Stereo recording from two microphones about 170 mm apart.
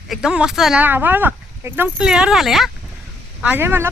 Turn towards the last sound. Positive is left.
turn(degrees=-15)  # may be behind; listen again after turning